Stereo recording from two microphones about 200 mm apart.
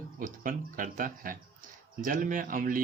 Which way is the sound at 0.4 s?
45° right (ahead or behind).